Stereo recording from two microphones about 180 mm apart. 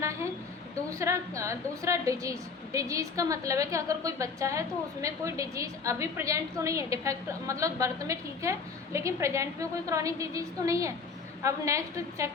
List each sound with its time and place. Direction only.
0.9 s a woman's voice: 15° right (ahead or behind)